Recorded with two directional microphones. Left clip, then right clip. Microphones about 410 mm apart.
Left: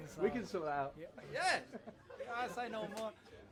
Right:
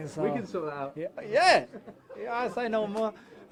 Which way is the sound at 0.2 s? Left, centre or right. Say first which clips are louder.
Right 7 dB; right.